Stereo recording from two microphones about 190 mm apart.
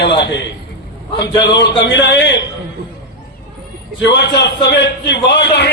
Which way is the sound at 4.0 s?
65° left (ahead or behind).